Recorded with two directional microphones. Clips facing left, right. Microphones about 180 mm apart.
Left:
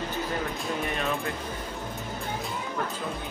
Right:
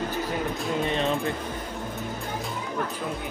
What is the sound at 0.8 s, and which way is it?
Speech, 30° right (ahead or behind).